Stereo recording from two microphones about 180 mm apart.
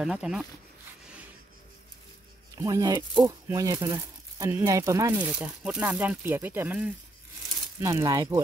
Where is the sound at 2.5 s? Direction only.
20° right (ahead or behind).